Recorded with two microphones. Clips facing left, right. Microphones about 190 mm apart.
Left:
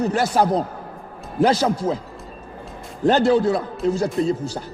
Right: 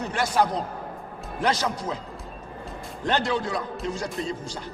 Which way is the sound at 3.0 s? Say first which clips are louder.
Left 10 dB; 35° left (ahead or behind).